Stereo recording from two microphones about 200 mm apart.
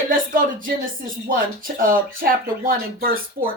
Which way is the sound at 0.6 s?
45° right (ahead or behind).